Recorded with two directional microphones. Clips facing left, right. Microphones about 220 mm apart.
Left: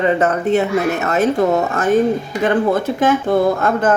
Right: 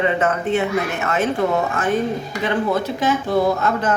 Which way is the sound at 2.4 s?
50° left (ahead or behind).